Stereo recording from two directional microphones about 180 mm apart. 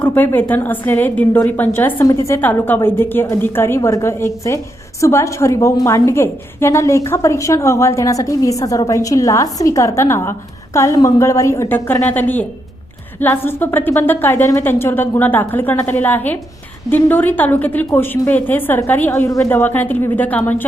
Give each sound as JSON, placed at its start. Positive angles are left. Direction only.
{"t": 0.0, "sound": "a woman's voice", "side_deg": 10}